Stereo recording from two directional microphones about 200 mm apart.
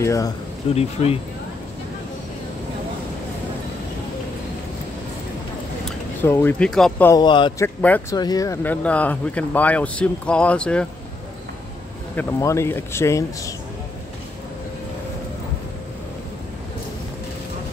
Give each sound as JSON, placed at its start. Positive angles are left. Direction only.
{"t": 0.0, "sound": "speech", "side_deg": 15}
{"t": 0.7, "sound": "speech", "side_deg": 30}
{"t": 6.2, "sound": "speech", "side_deg": 10}
{"t": 7.1, "sound": "speech", "side_deg": 20}
{"t": 7.6, "sound": "speech", "side_deg": 10}
{"t": 12.2, "sound": "speech", "side_deg": 10}